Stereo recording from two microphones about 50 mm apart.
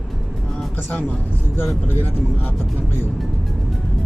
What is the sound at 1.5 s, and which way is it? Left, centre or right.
Speech, left.